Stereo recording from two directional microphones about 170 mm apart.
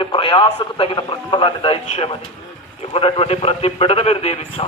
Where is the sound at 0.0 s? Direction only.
30° left (ahead or behind).